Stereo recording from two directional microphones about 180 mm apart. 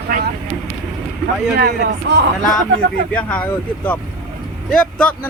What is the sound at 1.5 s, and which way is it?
Speech, 65° right (ahead or behind).